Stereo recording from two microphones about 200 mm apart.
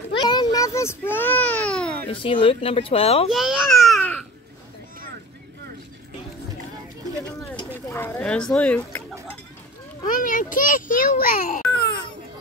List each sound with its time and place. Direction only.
0.2 s baby cry: 20° left (ahead or behind); by 2.0 s 5° left (ahead or behind)
2.0 s speech: 25° left (ahead or behind)
3.3 s babbling: centre (ahead or behind)
7.9 s speech: 10° left (ahead or behind)
10.2 s a child's voice: 40° left (ahead or behind)
11.7 s a sound: 55° left (ahead or behind)